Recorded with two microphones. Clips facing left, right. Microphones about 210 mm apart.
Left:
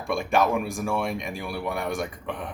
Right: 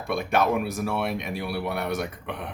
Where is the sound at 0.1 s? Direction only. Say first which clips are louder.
Even; centre (ahead or behind).